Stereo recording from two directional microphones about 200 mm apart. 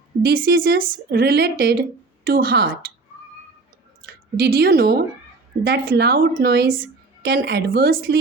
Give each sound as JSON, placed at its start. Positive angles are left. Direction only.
{"t": 0.3, "sound": "speech", "side_deg": -60}
{"t": 4.0, "sound": "speech", "side_deg": -50}